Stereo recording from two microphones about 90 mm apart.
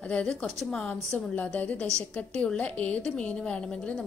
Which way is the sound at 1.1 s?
15° left (ahead or behind).